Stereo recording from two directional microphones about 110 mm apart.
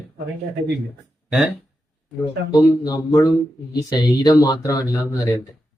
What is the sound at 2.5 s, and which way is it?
Speech, 35° left (ahead or behind).